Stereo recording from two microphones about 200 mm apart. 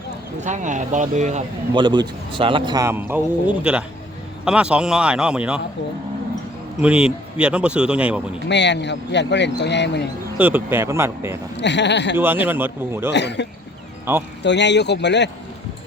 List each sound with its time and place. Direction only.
0.4 s speech: 40° right (ahead or behind)
1.7 s a man's voice: 25° right (ahead or behind); by 5.5 s 5° right (ahead or behind)
6.8 s a man's voice: 5° right (ahead or behind)
8.4 s speech: 60° left (ahead or behind)
10.3 s a man's voice: 10° right (ahead or behind)
11.5 s speech: 60° left (ahead or behind)
12.1 s a man's voice: 10° right (ahead or behind)
13.1 s speech: 60° left (ahead or behind)